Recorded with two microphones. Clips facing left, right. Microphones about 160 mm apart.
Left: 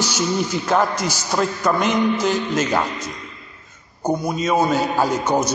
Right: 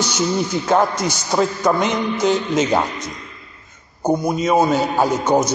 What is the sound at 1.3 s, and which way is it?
A man's voice, 15° right (ahead or behind).